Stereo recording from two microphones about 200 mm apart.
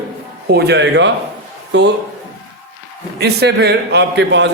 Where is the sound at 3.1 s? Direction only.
55° right (ahead or behind).